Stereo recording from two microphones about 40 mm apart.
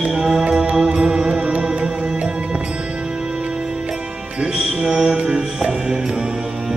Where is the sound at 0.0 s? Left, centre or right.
Centre.